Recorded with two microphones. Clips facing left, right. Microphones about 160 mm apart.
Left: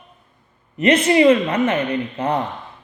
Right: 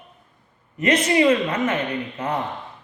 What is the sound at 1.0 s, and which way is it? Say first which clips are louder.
A woman's voice: left 4 dB; 30° left (ahead or behind).